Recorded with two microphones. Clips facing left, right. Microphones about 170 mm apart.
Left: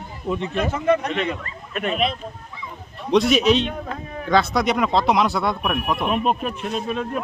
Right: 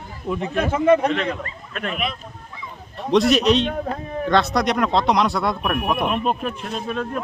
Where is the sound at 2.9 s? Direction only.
Centre (ahead or behind).